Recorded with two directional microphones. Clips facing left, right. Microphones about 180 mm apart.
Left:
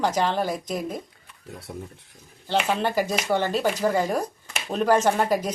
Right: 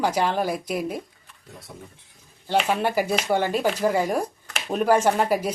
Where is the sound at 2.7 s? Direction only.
10° right (ahead or behind).